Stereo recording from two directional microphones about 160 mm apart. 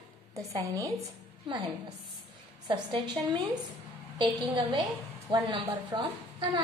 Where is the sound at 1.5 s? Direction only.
35° right (ahead or behind).